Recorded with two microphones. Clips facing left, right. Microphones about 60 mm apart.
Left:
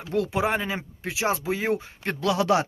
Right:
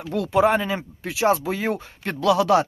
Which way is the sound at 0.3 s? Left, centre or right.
Centre.